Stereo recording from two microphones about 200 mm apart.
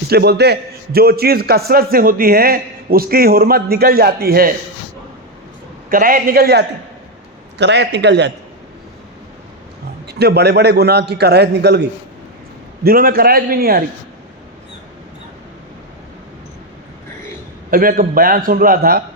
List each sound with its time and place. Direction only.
0.1 s a man's voice: 55° right (ahead or behind)
5.9 s a man's voice: 45° right (ahead or behind)
10.1 s a man's voice: 55° right (ahead or behind)
17.7 s a man's voice: 45° right (ahead or behind)